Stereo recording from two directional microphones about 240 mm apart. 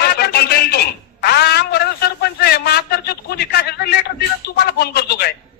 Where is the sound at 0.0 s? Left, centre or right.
Left.